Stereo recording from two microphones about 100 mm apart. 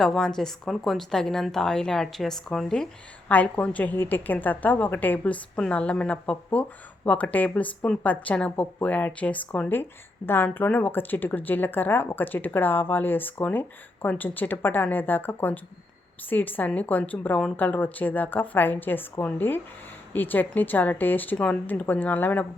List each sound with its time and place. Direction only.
0.0 s a woman's voice: 5° left (ahead or behind)